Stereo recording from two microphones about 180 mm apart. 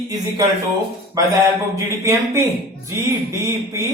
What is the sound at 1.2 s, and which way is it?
Speech, 15° right (ahead or behind).